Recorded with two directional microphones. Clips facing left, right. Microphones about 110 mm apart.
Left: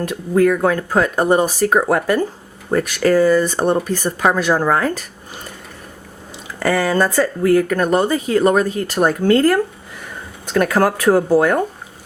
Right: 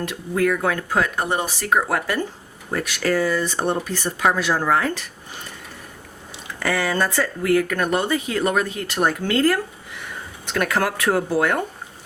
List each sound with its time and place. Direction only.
0.0 s speech: 40° left (ahead or behind)
6.6 s speech: 40° left (ahead or behind)